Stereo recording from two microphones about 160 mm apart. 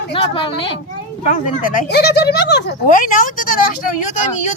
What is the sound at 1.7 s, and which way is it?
Speech, 90° left.